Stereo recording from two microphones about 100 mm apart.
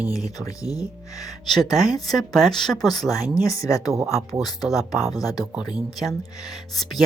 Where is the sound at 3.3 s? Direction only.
35° left (ahead or behind).